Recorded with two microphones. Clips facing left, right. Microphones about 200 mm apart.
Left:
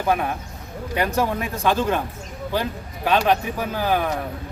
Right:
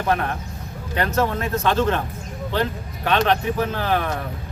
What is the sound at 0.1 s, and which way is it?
Speech, 10° left (ahead or behind).